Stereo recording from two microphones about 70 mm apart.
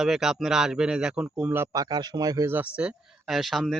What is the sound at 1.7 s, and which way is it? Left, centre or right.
Speech, right.